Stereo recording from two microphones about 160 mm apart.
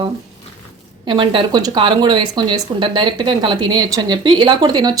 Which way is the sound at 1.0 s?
30° right (ahead or behind).